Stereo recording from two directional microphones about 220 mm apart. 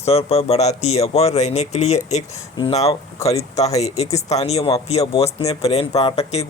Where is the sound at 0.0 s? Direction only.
30° left (ahead or behind).